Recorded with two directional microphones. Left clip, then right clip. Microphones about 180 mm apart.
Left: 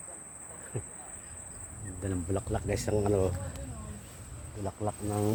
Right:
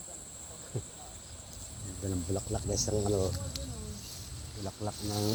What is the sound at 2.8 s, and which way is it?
Speech, 35° left (ahead or behind).